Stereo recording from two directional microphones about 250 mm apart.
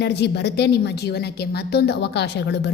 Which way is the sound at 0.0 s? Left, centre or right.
Left.